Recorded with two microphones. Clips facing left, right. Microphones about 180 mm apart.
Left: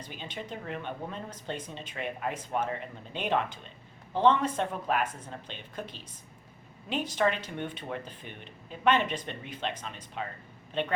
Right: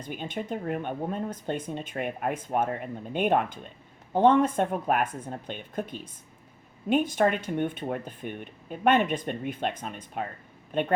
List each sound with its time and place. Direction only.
0.0 s speech: 50° right (ahead or behind)